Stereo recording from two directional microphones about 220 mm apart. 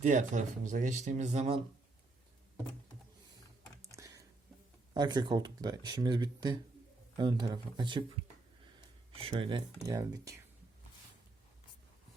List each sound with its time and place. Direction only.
0.0 s speech: 35° right (ahead or behind)
3.9 s a sound: 15° right (ahead or behind)
4.9 s speech: 20° right (ahead or behind)
9.1 s speech: 25° right (ahead or behind)